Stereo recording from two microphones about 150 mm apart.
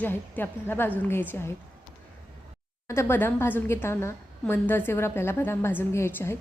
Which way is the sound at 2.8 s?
20° left (ahead or behind).